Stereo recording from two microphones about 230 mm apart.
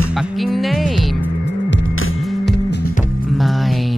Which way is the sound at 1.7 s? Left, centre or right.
Left.